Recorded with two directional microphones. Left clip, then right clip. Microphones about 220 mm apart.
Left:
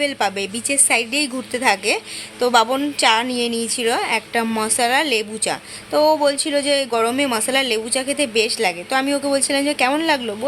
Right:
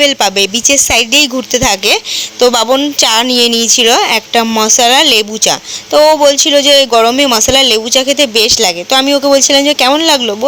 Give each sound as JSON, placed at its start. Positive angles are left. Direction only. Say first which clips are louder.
{"t": 0.0, "sound": "a woman's voice", "louder": "right 11 dB", "side_deg": -35}